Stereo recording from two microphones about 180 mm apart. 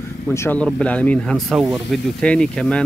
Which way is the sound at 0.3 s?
10° left (ahead or behind).